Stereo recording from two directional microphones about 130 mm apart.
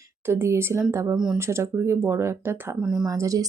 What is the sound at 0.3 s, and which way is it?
A woman's voice, 20° right (ahead or behind).